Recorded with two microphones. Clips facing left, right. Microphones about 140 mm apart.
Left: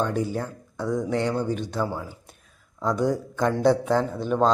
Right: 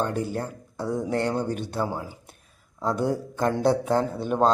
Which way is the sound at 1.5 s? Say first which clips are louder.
Left 2 dB; 50° right (ahead or behind).